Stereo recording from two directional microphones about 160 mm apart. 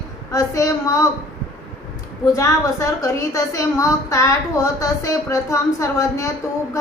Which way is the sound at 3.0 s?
20° left (ahead or behind).